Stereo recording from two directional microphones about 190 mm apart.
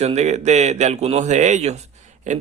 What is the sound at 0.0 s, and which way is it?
Speech, 35° right (ahead or behind).